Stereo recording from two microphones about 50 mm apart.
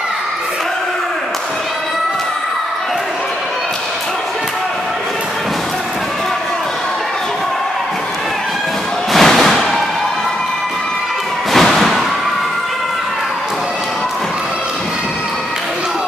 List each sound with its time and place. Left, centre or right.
9.1 s music: centre
11.5 s thump: centre